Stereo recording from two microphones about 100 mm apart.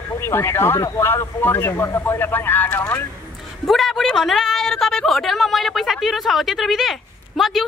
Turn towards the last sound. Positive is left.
turn(degrees=0)  # may be behind; listen again after turning